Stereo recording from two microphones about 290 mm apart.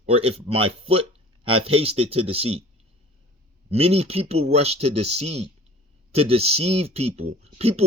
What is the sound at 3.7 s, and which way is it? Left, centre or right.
Speech, right.